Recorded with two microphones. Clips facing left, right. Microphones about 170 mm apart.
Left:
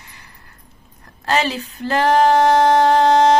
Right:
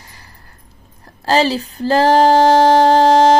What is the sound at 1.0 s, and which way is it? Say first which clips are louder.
Female singing: right 5 dB; 30° right (ahead or behind).